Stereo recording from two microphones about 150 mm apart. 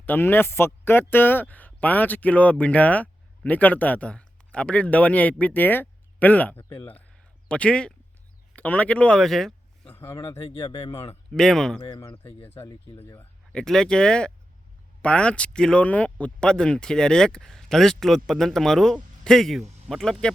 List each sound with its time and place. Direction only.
0.0 s speech: 15° left (ahead or behind)
9.9 s speech: 15° left (ahead or behind)
10.4 s speech: 40° left (ahead or behind)
11.3 s speech: 5° left (ahead or behind)
12.1 s speech: 15° left (ahead or behind)